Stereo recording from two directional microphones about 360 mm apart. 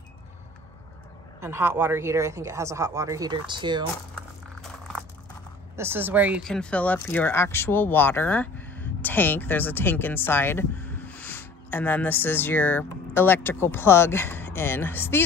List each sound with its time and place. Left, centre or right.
1.4 s speech: centre
5.8 s speech: centre